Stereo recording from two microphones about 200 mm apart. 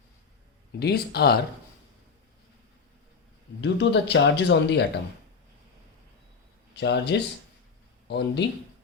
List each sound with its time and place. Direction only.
0.8 s speech: 55° left (ahead or behind)
3.6 s speech: 60° left (ahead or behind)
6.7 s a man's voice: 60° left (ahead or behind)